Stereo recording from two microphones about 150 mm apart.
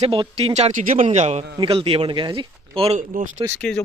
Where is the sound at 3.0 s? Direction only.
60° right (ahead or behind).